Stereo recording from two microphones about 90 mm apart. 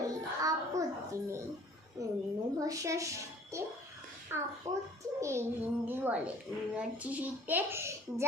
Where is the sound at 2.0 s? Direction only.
40° right (ahead or behind).